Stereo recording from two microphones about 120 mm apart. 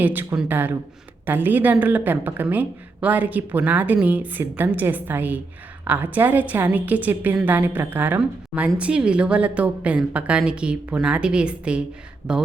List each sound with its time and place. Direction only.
0.0 s speech: 15° right (ahead or behind)